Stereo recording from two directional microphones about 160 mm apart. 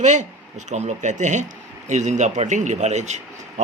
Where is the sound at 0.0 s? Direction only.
50° right (ahead or behind).